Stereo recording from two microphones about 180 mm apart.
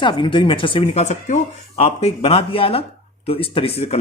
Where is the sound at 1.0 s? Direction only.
40° left (ahead or behind).